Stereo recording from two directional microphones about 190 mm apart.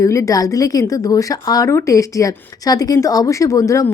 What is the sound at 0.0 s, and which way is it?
A woman's voice, 15° left (ahead or behind).